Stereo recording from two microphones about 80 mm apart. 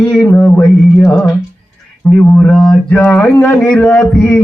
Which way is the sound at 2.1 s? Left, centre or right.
Centre.